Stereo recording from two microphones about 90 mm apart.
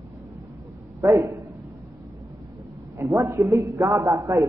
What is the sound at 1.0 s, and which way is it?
Speech, 35° right (ahead or behind).